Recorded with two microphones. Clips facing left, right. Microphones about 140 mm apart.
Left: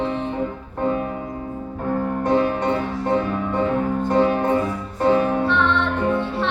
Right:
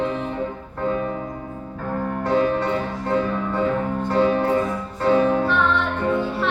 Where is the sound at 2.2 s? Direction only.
25° left (ahead or behind).